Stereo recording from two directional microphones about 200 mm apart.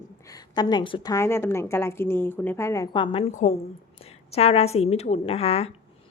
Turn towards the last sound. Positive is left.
turn(degrees=30)  # may be behind; listen again after turning